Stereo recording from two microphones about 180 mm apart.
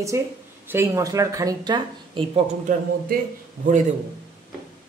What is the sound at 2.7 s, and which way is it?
Speech, 45° right (ahead or behind).